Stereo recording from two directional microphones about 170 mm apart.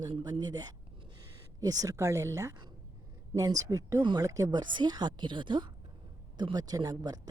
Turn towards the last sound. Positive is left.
turn(degrees=-20)  # may be behind; listen again after turning